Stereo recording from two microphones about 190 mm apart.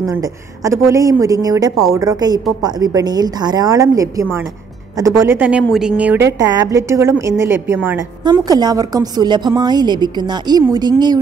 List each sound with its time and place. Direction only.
0.7 s a woman's voice: 15° right (ahead or behind)